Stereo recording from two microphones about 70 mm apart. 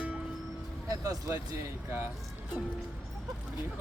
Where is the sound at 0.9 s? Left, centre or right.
Right.